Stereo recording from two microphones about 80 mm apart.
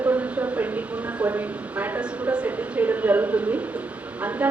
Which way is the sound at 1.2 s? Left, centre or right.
Right.